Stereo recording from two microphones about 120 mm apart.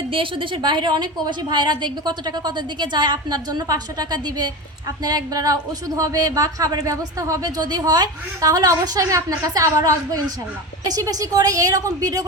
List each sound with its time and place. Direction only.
0.1 s a woman's voice: 45° right (ahead or behind); by 12.2 s 30° right (ahead or behind)